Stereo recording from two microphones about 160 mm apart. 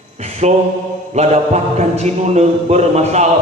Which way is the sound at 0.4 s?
45° right (ahead or behind).